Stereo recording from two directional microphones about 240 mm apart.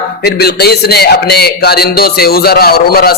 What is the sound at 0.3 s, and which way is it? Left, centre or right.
Speech, left.